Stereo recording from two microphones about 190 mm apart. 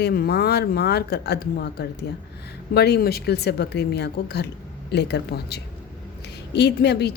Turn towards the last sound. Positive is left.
turn(degrees=60)  # may be behind; listen again after turning